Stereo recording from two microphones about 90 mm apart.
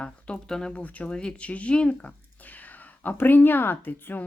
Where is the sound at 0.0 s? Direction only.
10° left (ahead or behind).